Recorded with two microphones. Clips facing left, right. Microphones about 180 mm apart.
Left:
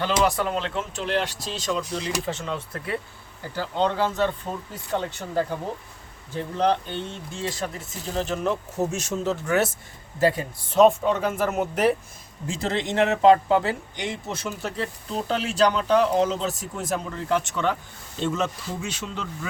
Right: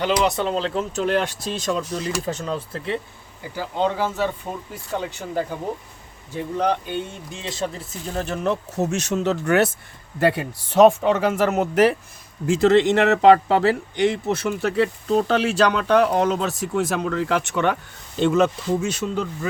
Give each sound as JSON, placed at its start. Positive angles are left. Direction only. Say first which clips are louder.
{"t": 0.3, "sound": "speech", "louder": "right 3 dB", "side_deg": -25}
{"t": 3.5, "sound": "speech", "louder": "right 1 dB", "side_deg": -10}
{"t": 8.2, "sound": "speech", "louder": "right 2 dB", "side_deg": -70}
{"t": 18.8, "sound": "speech", "louder": "right 8 dB", "side_deg": -45}